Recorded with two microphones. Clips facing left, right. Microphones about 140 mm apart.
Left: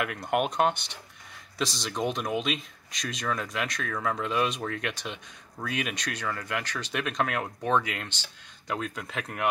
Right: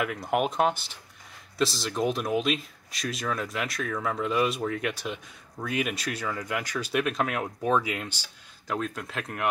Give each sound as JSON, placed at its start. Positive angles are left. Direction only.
{"t": 0.0, "sound": "speech", "side_deg": 0}